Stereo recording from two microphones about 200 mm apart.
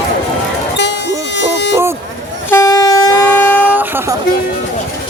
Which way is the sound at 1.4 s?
60° left (ahead or behind).